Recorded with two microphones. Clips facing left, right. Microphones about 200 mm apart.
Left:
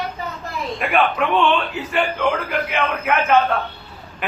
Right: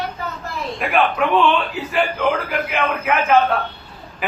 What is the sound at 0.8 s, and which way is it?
A man's voice, centre (ahead or behind).